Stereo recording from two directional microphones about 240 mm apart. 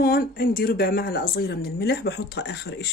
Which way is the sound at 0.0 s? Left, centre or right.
Left.